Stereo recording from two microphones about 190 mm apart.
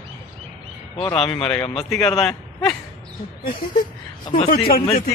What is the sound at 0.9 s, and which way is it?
Speech, 30° left (ahead or behind).